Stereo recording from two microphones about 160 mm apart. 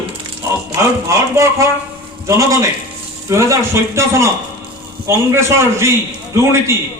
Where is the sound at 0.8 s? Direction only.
20° right (ahead or behind).